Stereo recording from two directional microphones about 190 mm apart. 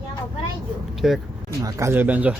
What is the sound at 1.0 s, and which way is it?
Speech, 5° right (ahead or behind).